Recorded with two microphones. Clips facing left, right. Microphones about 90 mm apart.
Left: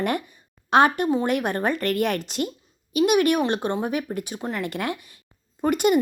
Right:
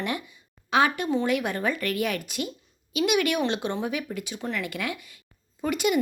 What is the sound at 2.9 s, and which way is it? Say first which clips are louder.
A woman's voice: left 5 dB; 40° left (ahead or behind).